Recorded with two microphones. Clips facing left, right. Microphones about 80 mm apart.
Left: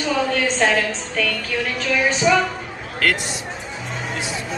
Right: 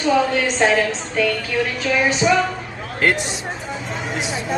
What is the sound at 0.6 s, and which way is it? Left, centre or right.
Speech, centre.